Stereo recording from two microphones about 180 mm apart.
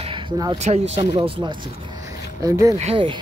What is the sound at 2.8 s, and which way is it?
Speech, 30° right (ahead or behind).